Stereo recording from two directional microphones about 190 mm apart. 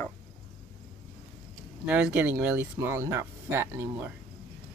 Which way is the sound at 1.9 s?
5° right (ahead or behind).